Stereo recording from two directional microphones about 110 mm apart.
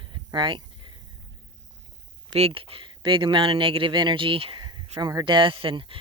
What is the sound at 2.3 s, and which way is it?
Speech, 55° right (ahead or behind).